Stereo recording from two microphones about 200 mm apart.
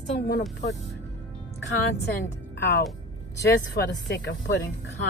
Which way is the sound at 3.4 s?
55° left (ahead or behind).